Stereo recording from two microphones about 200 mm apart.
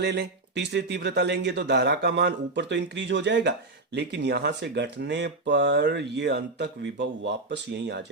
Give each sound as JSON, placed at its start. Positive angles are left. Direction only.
{"t": 0.0, "sound": "speech", "side_deg": -60}